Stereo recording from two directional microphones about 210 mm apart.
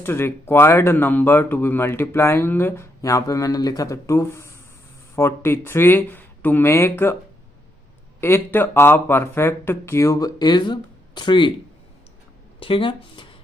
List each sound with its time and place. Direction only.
0.0 s speech: 10° left (ahead or behind)
8.2 s speech: 10° left (ahead or behind)
12.5 s speech: 25° left (ahead or behind)